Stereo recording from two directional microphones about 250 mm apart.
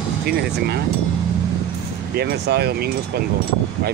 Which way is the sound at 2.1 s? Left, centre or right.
Right.